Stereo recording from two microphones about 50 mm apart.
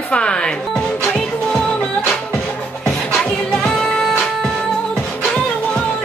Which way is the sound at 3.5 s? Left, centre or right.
Centre.